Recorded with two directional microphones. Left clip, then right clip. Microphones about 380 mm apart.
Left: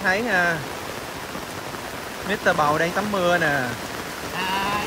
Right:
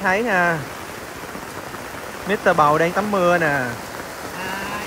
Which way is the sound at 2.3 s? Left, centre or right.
Centre.